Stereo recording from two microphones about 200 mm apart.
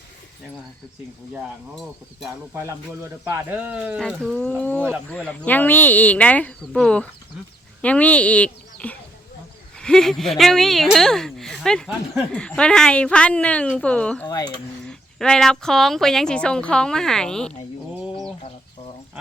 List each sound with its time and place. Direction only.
2.6 s speech: 15° right (ahead or behind)
4.0 s speech: 5° left (ahead or behind)
14.3 s speech: 20° left (ahead or behind)
14.8 s speech: 5° left (ahead or behind)